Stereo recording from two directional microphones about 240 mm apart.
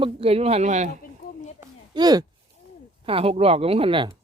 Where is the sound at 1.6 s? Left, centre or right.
Centre.